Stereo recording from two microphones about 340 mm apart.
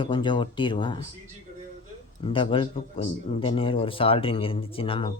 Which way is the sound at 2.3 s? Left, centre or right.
Centre.